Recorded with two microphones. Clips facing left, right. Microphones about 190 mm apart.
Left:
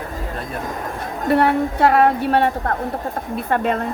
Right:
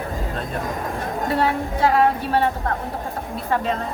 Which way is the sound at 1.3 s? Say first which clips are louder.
Left 6 dB; 60° left (ahead or behind).